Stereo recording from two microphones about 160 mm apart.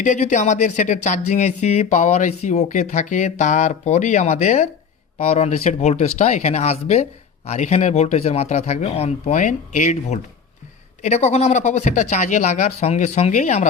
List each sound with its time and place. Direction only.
0.0 s speech: 50° left (ahead or behind)